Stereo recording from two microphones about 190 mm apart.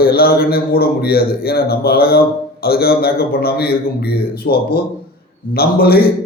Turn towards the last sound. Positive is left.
turn(degrees=55)  # may be behind; listen again after turning